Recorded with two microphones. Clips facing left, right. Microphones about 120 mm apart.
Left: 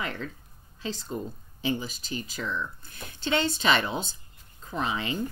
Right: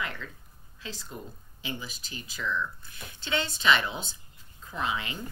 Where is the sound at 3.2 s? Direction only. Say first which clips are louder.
Left 5 dB; 35° left (ahead or behind).